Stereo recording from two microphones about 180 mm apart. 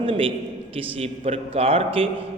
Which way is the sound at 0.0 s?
30° right (ahead or behind).